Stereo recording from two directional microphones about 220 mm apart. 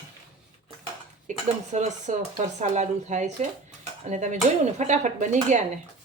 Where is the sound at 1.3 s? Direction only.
35° right (ahead or behind).